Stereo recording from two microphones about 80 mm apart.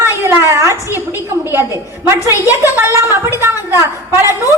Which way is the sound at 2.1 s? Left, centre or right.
Right.